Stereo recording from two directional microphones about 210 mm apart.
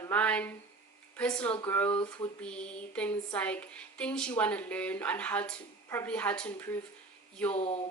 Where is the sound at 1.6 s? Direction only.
10° left (ahead or behind).